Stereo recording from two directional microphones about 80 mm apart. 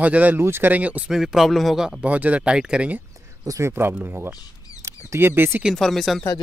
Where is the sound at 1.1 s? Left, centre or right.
Centre.